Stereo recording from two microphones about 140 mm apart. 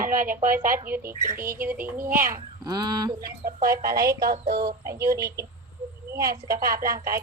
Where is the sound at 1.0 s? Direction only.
90° right.